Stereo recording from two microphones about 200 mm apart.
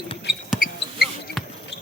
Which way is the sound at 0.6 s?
45° left (ahead or behind).